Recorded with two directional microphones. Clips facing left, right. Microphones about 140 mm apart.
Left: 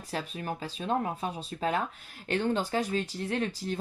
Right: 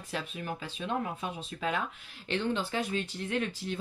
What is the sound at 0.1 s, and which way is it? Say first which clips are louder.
Speech: left 2 dB; 40° left (ahead or behind).